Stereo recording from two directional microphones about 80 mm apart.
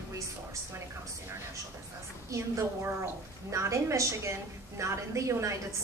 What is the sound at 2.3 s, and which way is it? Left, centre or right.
A woman's voice, right.